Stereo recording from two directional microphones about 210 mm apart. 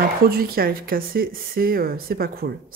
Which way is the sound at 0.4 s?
45° right (ahead or behind).